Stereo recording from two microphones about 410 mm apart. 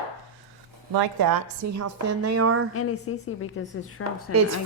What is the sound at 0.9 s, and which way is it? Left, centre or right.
A woman's voice, right.